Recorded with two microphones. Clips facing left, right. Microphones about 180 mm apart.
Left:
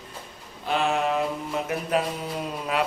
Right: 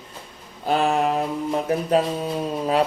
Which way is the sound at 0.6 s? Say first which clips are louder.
Right 4 dB; 35° right (ahead or behind).